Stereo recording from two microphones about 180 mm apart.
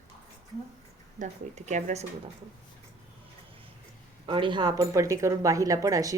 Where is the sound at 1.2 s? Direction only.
40° right (ahead or behind).